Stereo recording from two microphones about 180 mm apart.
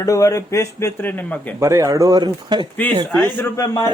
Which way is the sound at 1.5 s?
15° right (ahead or behind).